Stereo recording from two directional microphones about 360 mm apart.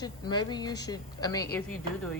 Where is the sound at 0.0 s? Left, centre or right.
Centre.